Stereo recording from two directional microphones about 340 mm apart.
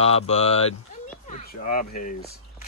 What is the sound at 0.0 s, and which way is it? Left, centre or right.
Speech, centre.